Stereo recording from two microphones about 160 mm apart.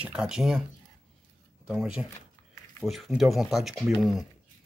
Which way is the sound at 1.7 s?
5° right (ahead or behind).